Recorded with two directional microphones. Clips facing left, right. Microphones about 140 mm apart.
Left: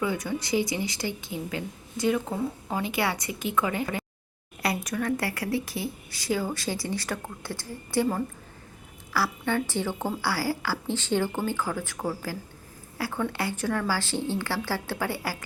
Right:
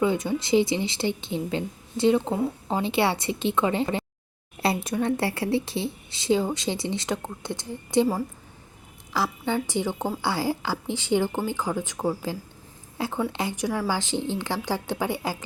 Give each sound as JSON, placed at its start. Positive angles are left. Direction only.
{"t": 0.0, "sound": "a woman's voice", "side_deg": -25}
{"t": 9.4, "sound": "a woman's voice", "side_deg": -10}